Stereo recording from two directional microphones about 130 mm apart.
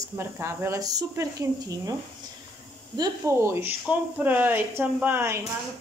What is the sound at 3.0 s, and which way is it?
Speech, 20° right (ahead or behind).